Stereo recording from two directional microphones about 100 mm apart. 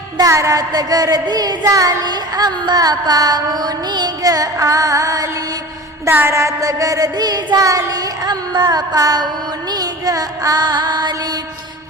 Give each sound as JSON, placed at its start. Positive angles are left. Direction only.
{"t": 0.2, "sound": "child singing", "side_deg": -30}
{"t": 6.1, "sound": "child singing", "side_deg": -20}
{"t": 9.7, "sound": "music", "side_deg": -40}